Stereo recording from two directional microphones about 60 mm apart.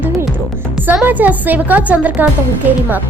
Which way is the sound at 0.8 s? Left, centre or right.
Right.